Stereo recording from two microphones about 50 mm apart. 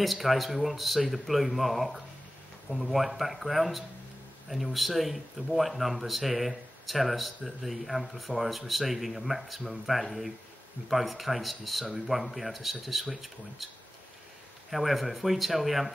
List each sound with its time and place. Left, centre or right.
0.0 s speech: centre
14.7 s speech: centre